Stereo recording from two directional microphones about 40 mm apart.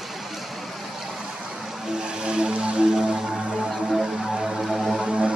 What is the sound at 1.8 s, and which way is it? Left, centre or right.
Music, centre.